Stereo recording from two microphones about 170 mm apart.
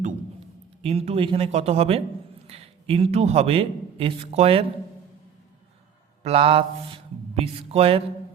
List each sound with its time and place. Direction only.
0.8 s a man's voice: 35° right (ahead or behind)
6.2 s speech: 35° right (ahead or behind)